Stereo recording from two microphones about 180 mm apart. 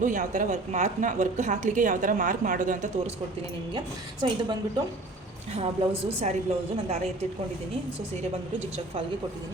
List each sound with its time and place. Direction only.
0.0 s a woman's voice: 45° right (ahead or behind)
3.8 s a woman's voice: 25° right (ahead or behind)
5.5 s a woman's voice: 35° right (ahead or behind)